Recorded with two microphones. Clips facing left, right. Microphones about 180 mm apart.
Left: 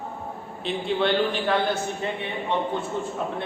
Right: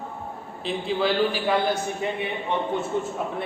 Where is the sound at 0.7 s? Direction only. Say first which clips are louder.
Left 1 dB; centre (ahead or behind).